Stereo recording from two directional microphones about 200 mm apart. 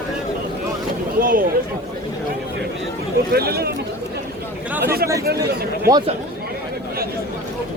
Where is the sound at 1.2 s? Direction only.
45° right (ahead or behind).